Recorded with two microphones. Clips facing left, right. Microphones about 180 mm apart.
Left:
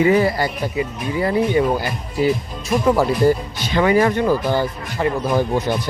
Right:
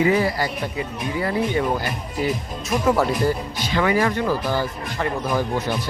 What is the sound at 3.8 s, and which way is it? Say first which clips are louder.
Speech: left 4 dB; 30° left (ahead or behind).